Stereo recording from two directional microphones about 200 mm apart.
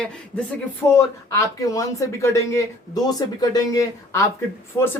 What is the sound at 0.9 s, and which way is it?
Speech, 15° left (ahead or behind).